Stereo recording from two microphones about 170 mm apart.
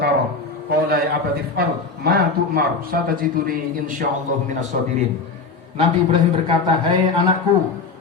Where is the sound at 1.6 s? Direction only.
70° right (ahead or behind); by 4.9 s 50° right (ahead or behind).